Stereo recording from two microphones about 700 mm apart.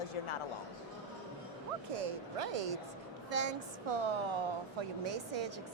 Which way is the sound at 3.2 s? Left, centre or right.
Right.